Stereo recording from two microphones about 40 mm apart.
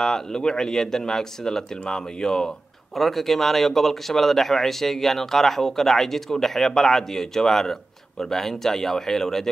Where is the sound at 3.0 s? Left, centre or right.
Centre.